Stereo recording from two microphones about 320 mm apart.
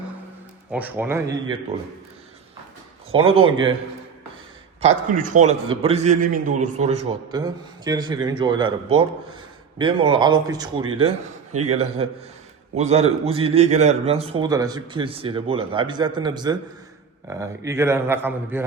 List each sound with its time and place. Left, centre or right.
0.7 s speech: centre
3.1 s a man's voice: centre
5.1 s a man's voice: right
11.5 s a man's voice: right
12.7 s a man's voice: right